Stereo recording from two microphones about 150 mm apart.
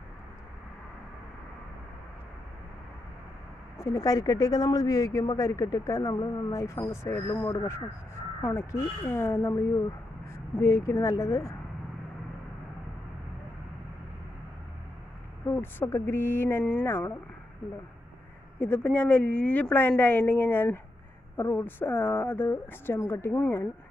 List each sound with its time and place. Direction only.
3.7 s speech: 20° left (ahead or behind)
10.6 s speech: 20° left (ahead or behind)
15.4 s speech: 15° left (ahead or behind)
18.6 s speech: 10° left (ahead or behind)